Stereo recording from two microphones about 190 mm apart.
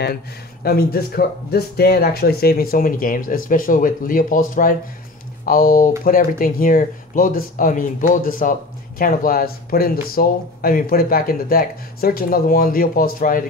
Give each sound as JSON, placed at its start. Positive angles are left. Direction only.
{"t": 0.7, "sound": "speech", "side_deg": 55}